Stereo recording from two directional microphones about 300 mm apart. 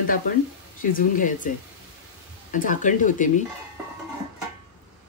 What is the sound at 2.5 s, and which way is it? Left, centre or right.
Speech, left.